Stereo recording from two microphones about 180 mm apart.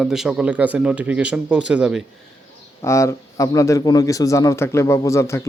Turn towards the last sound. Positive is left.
turn(degrees=15)  # may be behind; listen again after turning